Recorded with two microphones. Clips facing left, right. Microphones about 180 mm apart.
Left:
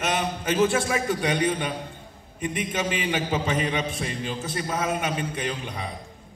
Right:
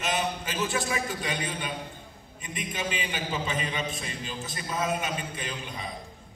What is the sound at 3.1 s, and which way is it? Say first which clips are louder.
A man's voice: left 6 dB; 50° left (ahead or behind).